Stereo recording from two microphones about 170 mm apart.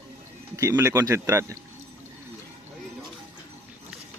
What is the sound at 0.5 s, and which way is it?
Speech, 15° right (ahead or behind).